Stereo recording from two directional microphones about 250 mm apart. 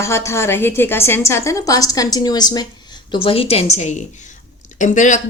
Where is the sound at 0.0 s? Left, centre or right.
Centre.